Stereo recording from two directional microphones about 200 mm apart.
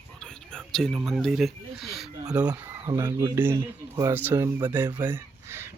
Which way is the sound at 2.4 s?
15° right (ahead or behind).